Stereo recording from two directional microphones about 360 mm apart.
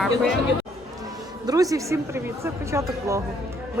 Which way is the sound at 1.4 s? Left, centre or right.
Centre.